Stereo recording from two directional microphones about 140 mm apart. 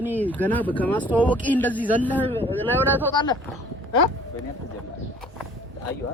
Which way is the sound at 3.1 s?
30° left (ahead or behind).